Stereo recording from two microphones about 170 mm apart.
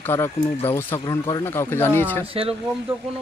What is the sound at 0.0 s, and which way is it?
Speech, 15° left (ahead or behind).